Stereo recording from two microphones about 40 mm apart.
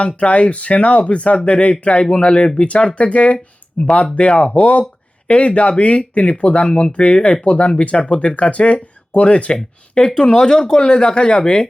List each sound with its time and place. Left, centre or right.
0.0 s speech: left
10.2 s speech: centre